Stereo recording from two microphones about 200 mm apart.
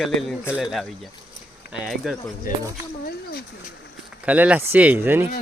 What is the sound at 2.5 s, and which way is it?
Speech, 45° left (ahead or behind).